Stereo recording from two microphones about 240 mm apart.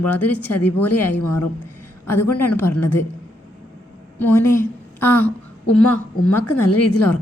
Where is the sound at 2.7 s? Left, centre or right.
Left.